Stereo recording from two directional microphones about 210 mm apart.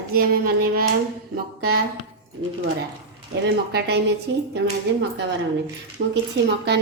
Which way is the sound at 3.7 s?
50° right (ahead or behind).